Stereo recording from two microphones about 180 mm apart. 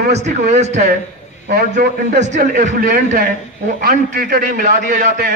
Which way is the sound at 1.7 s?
55° right (ahead or behind).